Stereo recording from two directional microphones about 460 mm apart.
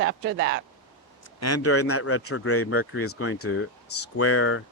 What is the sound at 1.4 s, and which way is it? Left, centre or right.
Speech, left.